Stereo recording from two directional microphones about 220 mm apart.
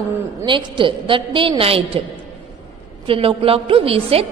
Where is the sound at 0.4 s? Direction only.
20° right (ahead or behind).